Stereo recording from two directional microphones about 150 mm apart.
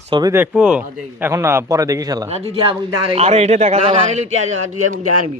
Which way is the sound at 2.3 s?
45° right (ahead or behind).